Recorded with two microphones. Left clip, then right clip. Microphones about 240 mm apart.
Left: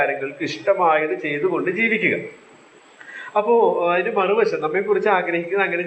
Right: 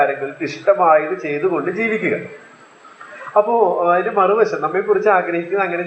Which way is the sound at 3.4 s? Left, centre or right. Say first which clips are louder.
Right 2 dB; left.